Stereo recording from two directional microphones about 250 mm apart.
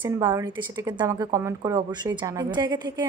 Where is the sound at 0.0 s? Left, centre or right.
Centre.